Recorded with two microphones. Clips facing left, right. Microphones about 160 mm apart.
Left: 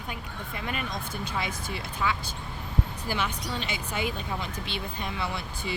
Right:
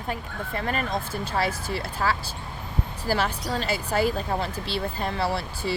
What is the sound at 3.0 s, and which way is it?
Speech, 35° right (ahead or behind).